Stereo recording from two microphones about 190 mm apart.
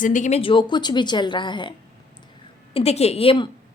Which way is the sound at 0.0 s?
40° left (ahead or behind).